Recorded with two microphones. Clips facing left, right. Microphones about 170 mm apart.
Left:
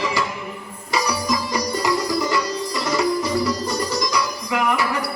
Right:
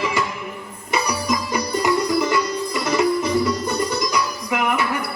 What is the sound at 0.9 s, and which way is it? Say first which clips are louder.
Music: even; 20° right (ahead or behind).